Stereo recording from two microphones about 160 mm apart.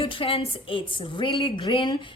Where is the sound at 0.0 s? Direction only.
35° left (ahead or behind).